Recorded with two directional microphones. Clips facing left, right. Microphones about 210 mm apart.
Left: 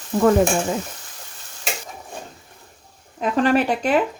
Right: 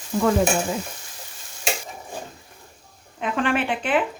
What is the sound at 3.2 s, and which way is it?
Speech, 40° left (ahead or behind).